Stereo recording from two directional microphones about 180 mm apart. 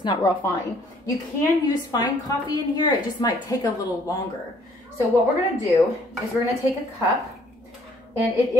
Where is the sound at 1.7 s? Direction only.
20° left (ahead or behind).